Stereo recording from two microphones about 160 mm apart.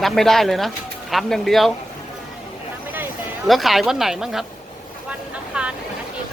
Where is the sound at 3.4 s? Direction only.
Centre (ahead or behind).